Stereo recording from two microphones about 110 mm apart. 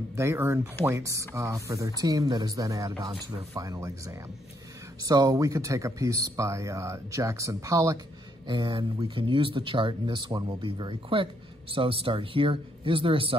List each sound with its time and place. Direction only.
0.1 s speech: 25° right (ahead or behind)
5.0 s speech: 35° right (ahead or behind)
8.5 s a man's voice: 45° right (ahead or behind)